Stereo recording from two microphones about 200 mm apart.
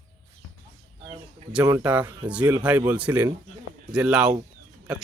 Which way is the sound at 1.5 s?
10° right (ahead or behind).